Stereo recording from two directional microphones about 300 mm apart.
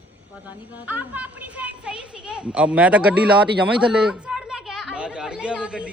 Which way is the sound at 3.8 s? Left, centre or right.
Centre.